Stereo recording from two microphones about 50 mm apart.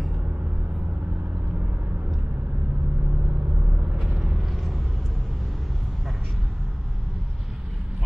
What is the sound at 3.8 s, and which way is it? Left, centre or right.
Vehicle, right.